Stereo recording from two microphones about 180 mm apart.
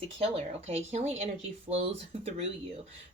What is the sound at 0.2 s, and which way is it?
Speech, 35° right (ahead or behind).